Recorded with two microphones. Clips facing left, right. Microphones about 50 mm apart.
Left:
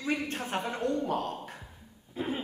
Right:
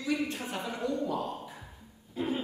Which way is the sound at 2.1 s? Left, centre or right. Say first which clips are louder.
Right 1 dB; centre.